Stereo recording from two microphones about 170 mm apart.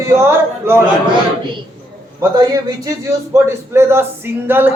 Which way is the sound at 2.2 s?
20° right (ahead or behind).